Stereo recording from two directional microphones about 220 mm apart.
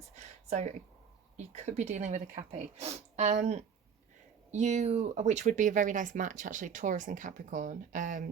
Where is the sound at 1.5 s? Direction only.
30° right (ahead or behind).